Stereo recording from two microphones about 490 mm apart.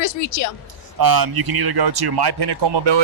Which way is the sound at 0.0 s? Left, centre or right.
Left.